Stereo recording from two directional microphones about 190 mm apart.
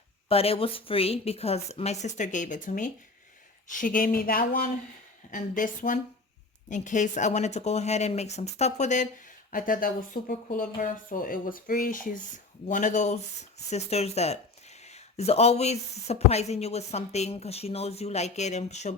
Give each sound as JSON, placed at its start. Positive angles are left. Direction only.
{"t": 0.3, "sound": "speech", "side_deg": 30}